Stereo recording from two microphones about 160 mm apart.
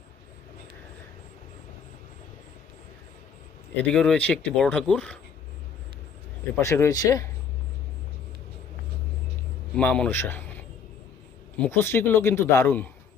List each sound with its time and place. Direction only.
3.8 s speech: 5° left (ahead or behind)
6.6 s speech: 20° left (ahead or behind)
9.7 s a man's voice: 5° left (ahead or behind)
11.5 s a man's voice: 10° left (ahead or behind)